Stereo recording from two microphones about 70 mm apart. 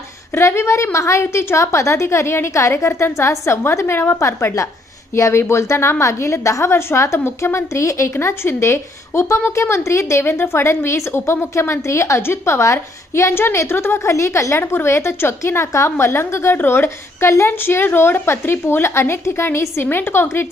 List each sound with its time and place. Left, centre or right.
0.3 s a woman's voice: left